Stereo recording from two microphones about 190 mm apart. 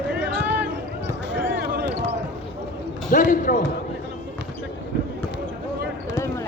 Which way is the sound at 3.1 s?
45° left (ahead or behind).